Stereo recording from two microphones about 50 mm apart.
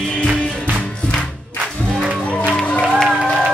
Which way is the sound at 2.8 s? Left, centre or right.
Centre.